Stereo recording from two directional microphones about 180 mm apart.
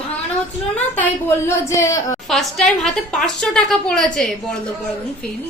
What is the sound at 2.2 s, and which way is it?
A woman's voice, centre (ahead or behind).